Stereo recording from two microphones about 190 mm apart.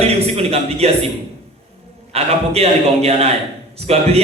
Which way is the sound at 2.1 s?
35° right (ahead or behind).